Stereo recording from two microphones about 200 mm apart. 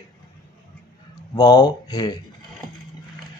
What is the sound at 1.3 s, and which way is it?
Speech, 20° left (ahead or behind).